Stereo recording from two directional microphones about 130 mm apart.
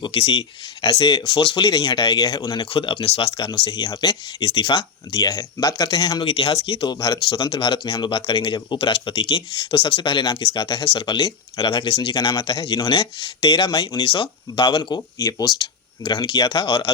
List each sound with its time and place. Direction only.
0.0 s speech: 40° left (ahead or behind)
0.8 s speech: 30° left (ahead or behind)
1.2 s speech: 40° left (ahead or behind)
2.6 s speech: 40° left (ahead or behind)
3.7 s speech: 30° left (ahead or behind)
6.2 s speech: 50° left (ahead or behind)
6.9 s speech: 30° left (ahead or behind)
7.3 s speech: 40° left (ahead or behind)